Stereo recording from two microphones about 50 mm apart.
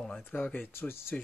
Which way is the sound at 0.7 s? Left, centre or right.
Left.